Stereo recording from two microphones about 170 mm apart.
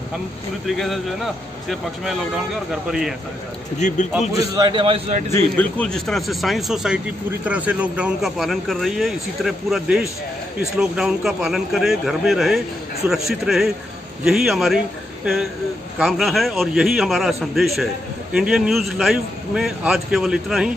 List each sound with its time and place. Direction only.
0.7 s a man's voice: centre (ahead or behind)
3.7 s a man's voice: 45° left (ahead or behind)
4.6 s a man's voice: 30° right (ahead or behind)
5.3 s a man's voice: 10° left (ahead or behind)
16.0 s a man's voice: centre (ahead or behind)